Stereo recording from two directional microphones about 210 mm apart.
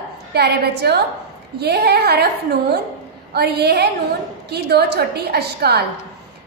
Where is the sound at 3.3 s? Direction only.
50° right (ahead or behind).